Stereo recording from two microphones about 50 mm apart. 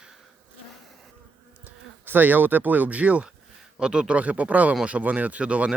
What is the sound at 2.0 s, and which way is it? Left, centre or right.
Speech, right.